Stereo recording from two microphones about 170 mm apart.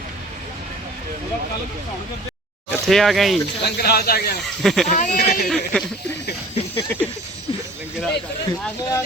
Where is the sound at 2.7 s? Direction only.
Centre (ahead or behind).